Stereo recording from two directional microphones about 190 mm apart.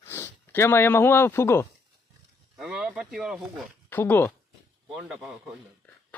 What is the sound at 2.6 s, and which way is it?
Speech, 5° right (ahead or behind).